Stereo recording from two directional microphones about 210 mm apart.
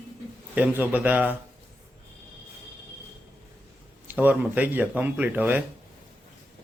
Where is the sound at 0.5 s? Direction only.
10° right (ahead or behind).